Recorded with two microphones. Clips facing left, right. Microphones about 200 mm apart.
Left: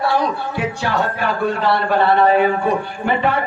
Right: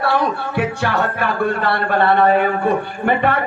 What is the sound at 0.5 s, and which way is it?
A man's voice, 55° right (ahead or behind).